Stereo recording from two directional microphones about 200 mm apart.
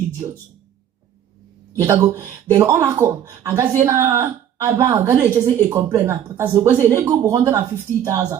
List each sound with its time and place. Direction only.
1.8 s speech: 15° right (ahead or behind)